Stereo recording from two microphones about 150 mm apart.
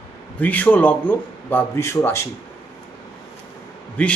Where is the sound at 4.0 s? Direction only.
10° left (ahead or behind).